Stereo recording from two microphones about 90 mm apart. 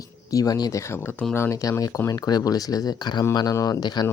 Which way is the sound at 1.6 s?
40° left (ahead or behind).